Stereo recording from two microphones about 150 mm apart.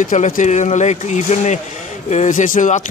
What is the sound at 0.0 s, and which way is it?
Speech, 60° left (ahead or behind).